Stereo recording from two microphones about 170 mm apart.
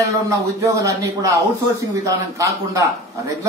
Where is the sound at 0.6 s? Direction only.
20° right (ahead or behind).